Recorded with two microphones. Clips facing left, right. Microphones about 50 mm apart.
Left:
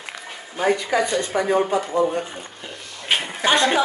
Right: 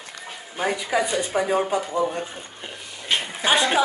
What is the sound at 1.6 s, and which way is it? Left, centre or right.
Speech, centre.